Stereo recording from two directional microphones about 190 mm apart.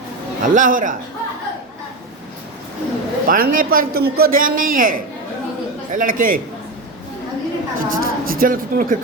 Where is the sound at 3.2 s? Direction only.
45° right (ahead or behind).